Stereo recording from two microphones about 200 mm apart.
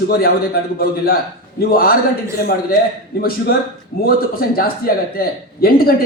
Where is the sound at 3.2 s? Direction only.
50° left (ahead or behind).